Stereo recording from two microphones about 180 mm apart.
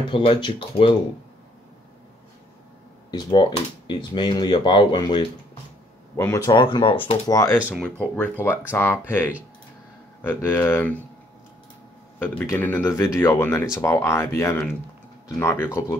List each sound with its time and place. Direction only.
0.1 s speech: 30° left (ahead or behind)
3.1 s speech: 25° left (ahead or behind)
7.5 s speech: 5° right (ahead or behind)
7.8 s speech: 5° left (ahead or behind)
10.2 s speech: 10° left (ahead or behind)
12.2 s speech: 10° left (ahead or behind)